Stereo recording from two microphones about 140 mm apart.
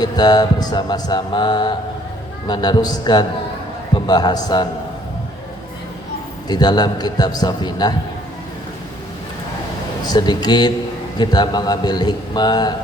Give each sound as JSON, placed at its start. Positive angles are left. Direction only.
{"t": 0.0, "sound": "mantra", "side_deg": 30}
{"t": 3.9, "sound": "a man's voice", "side_deg": 30}
{"t": 6.5, "sound": "a man's voice", "side_deg": 30}
{"t": 10.1, "sound": "mantra", "side_deg": 30}
{"t": 11.2, "sound": "a man's voice", "side_deg": 30}